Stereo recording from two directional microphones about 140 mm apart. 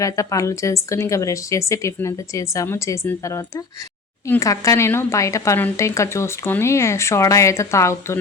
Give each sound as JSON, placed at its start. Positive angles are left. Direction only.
{"t": 0.0, "sound": "a woman's voice", "side_deg": 25}